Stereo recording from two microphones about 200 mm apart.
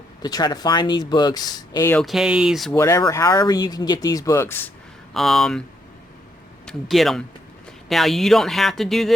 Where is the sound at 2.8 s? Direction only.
15° left (ahead or behind).